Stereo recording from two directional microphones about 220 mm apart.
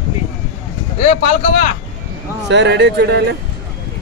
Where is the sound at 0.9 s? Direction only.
30° left (ahead or behind).